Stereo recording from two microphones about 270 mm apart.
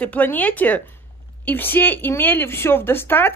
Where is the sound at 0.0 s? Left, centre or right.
Centre.